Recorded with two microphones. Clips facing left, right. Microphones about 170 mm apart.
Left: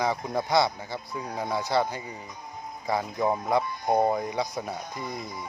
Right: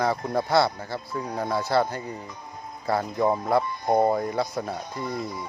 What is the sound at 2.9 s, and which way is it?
Speech, centre (ahead or behind).